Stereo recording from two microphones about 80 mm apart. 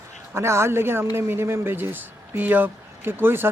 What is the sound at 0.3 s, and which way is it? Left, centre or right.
Speech, right.